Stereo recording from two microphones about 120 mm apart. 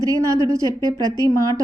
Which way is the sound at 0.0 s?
25° right (ahead or behind).